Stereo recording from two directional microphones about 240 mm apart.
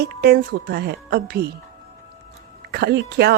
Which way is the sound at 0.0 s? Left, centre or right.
Right.